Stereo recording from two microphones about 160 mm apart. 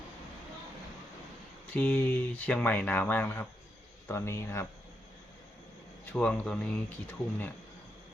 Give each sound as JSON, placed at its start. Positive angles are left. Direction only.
{"t": 1.7, "sound": "speech", "side_deg": 10}
{"t": 6.1, "sound": "speech", "side_deg": 5}